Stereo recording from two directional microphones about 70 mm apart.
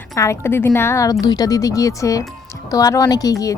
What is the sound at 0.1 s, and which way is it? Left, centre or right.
Speech, left.